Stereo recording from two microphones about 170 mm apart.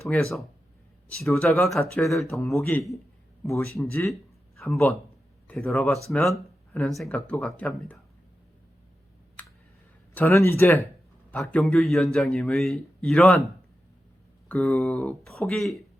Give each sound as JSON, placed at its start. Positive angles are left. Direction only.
{"t": 0.1, "sound": "speech", "side_deg": 5}
{"t": 3.4, "sound": "speech", "side_deg": 15}
{"t": 4.7, "sound": "speech", "side_deg": 0}
{"t": 9.4, "sound": "computer keyboard", "side_deg": 10}
{"t": 10.2, "sound": "speech", "side_deg": 15}
{"t": 11.3, "sound": "speech", "side_deg": 5}